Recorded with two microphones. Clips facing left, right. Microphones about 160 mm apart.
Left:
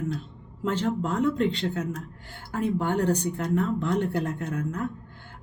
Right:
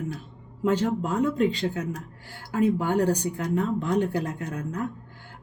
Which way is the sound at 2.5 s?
10° right (ahead or behind).